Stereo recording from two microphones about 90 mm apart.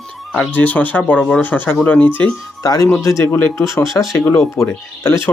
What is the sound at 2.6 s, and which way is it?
Speech, 45° left (ahead or behind).